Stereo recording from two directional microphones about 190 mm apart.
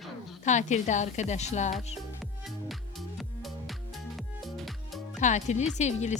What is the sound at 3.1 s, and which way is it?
Music, centre (ahead or behind).